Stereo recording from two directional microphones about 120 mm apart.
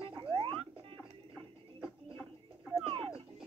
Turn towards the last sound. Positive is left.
turn(degrees=-45)  # may be behind; listen again after turning